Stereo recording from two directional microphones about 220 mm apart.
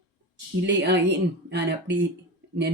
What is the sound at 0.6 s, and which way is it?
Speech, 55° right (ahead or behind).